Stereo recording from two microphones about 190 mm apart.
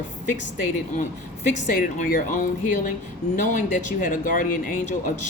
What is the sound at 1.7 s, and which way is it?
Speech, 45° left (ahead or behind).